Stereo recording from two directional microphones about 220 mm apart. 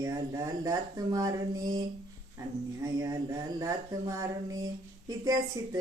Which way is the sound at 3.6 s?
15° right (ahead or behind).